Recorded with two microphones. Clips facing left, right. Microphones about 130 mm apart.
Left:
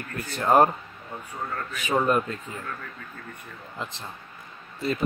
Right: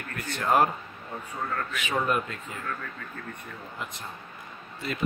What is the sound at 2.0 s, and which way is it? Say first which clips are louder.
Speech: left 4 dB; 35° left (ahead or behind).